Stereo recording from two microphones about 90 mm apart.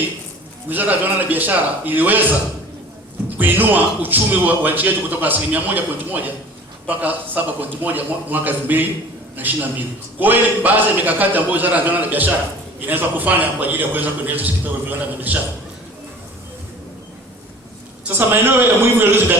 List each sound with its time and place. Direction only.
0.7 s a man's voice: 20° right (ahead or behind)
3.2 s a man's voice: 20° right (ahead or behind)
18.0 s a man's voice: 20° right (ahead or behind)